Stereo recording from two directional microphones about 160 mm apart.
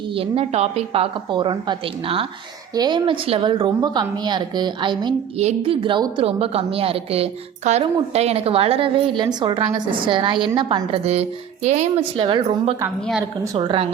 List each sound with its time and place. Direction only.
0.1 s a woman's voice: 35° right (ahead or behind)
5.4 s a woman's voice: 40° right (ahead or behind)